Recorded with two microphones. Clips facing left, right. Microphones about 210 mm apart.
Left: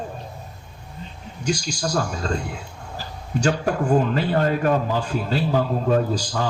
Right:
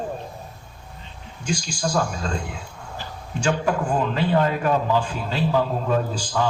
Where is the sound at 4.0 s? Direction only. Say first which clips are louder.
Even; 45° left (ahead or behind).